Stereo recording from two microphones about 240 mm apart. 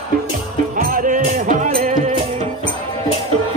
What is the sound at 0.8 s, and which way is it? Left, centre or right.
Music, right.